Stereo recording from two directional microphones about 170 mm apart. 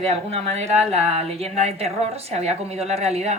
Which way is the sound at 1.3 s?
35° right (ahead or behind).